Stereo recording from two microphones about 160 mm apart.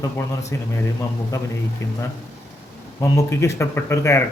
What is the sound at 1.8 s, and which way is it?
Speech, 20° left (ahead or behind).